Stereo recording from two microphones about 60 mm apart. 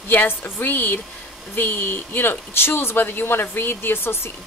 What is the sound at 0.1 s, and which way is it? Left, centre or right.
Speech, left.